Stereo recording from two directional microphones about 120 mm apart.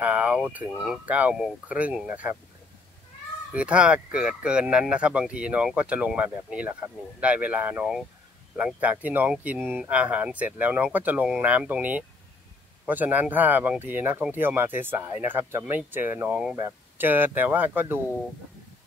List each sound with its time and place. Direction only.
0.0 s speech: 10° right (ahead or behind)
3.5 s speech: 10° right (ahead or behind)